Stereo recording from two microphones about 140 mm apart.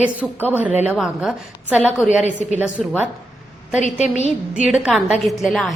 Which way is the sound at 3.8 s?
55° left (ahead or behind).